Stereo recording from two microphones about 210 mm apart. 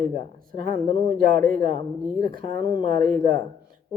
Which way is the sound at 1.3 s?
40° right (ahead or behind).